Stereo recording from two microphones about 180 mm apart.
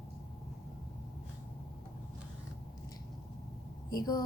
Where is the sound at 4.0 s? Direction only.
20° left (ahead or behind).